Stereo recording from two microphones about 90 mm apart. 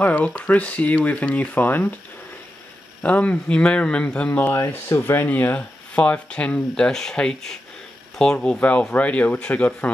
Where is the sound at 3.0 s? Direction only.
15° left (ahead or behind).